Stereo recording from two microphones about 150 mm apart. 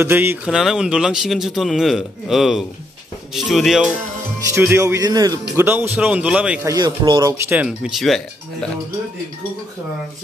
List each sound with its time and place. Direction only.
0.0 s a man's voice: 15° right (ahead or behind)
0.6 s a man's voice: 5° right (ahead or behind)
4.5 s speech: 15° right (ahead or behind)
5.6 s a man's voice: 15° right (ahead or behind)
6.6 s speech: 25° right (ahead or behind)
7.4 s a man's voice: 10° right (ahead or behind)